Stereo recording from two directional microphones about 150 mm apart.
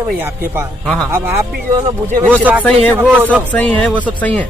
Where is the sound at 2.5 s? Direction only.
10° right (ahead or behind).